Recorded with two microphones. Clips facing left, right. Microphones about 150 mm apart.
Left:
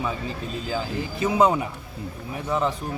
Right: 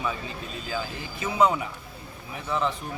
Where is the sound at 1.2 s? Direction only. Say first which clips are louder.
Left 3 dB; 35° left (ahead or behind).